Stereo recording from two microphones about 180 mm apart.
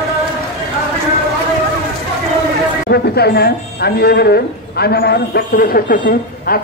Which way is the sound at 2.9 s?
65° left (ahead or behind).